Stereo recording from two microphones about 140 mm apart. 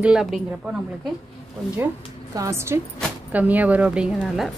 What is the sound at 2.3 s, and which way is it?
A woman's voice, 20° right (ahead or behind).